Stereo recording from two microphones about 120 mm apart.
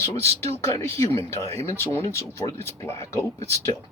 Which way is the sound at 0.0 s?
25° left (ahead or behind).